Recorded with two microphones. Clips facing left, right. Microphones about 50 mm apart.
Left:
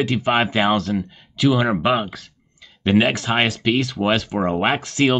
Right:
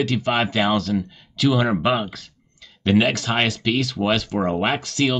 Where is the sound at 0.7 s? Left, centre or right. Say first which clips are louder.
Left 1 dB; centre.